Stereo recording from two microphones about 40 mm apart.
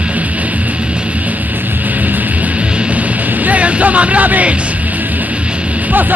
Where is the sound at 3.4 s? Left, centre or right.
Right.